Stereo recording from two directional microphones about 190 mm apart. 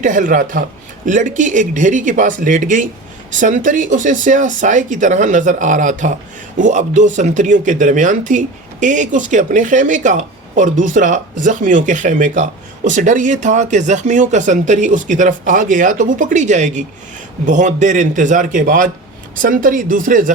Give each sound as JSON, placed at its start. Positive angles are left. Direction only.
{"t": 0.0, "sound": "speech", "side_deg": -40}